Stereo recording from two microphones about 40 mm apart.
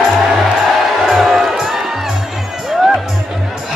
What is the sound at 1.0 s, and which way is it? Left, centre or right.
Music, centre.